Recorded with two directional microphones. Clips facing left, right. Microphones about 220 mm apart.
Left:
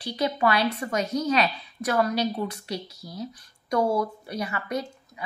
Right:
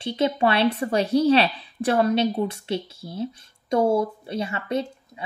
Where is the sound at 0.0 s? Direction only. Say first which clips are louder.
Right 3 dB; 25° right (ahead or behind).